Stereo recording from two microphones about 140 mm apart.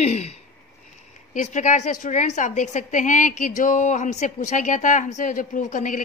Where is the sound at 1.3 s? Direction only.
60° left (ahead or behind).